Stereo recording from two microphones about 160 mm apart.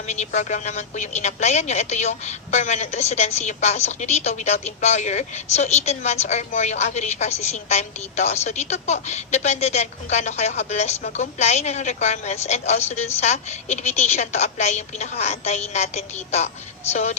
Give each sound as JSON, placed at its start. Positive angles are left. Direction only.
{"t": 0.3, "sound": "a woman's voice", "side_deg": 50}